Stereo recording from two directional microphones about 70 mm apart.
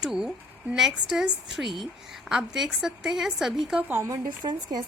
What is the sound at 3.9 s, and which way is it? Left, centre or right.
Speech, right.